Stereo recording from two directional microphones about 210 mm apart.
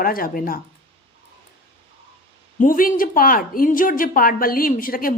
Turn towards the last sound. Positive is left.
turn(degrees=40)  # may be behind; listen again after turning